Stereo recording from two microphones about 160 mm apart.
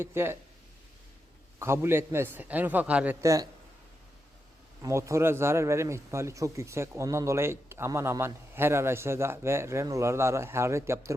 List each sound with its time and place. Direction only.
0.0 s a man's voice: 15° right (ahead or behind)
1.5 s a man's voice: 15° right (ahead or behind)
4.8 s a man's voice: 20° right (ahead or behind)